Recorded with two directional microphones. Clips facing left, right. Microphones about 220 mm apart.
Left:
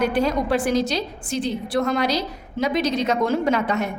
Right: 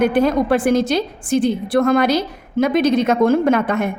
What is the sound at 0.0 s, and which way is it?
A woman's voice, 55° right (ahead or behind).